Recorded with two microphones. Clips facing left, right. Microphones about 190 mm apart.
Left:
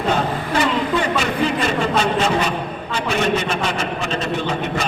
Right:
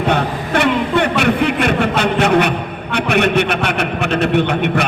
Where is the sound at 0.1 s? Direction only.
65° right (ahead or behind).